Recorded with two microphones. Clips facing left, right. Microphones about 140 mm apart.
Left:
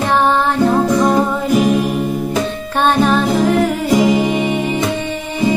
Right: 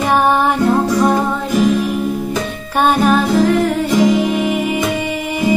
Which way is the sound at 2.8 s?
5° right (ahead or behind).